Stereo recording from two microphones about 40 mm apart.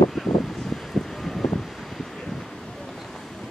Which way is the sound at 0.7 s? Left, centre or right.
Centre.